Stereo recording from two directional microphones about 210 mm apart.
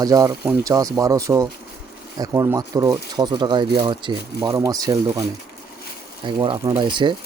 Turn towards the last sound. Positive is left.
turn(degrees=-20)  # may be behind; listen again after turning